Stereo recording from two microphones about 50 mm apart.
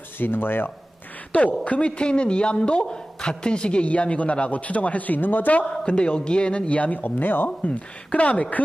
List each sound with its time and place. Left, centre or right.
0.2 s speech: left
1.6 s a man's voice: left
5.7 s a man's voice: left